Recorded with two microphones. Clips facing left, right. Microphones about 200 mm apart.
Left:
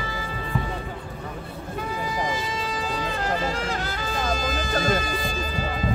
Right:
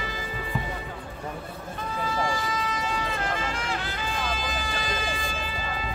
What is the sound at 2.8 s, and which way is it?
Music, 35° left (ahead or behind).